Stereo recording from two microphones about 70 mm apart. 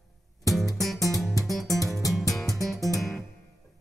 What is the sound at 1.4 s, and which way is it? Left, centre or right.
Music, centre.